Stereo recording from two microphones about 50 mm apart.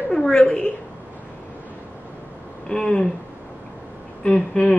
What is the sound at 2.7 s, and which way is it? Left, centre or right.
Speech, centre.